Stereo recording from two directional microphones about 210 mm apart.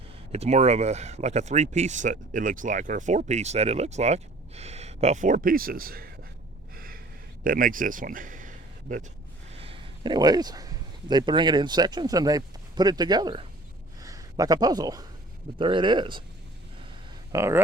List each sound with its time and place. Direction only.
0.3 s speech: 30° right (ahead or behind)
6.7 s gasp: 45° right (ahead or behind)
7.4 s speech: 40° right (ahead or behind)
9.6 s speech: 25° right (ahead or behind)
17.3 s speech: 15° right (ahead or behind)